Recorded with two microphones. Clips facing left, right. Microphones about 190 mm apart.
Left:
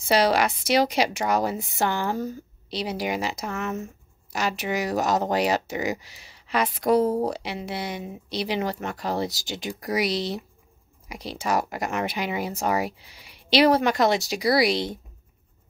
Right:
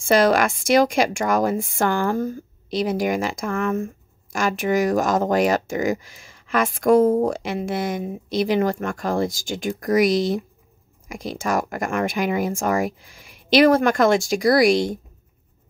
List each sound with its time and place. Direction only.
0.0 s speech: 50° right (ahead or behind)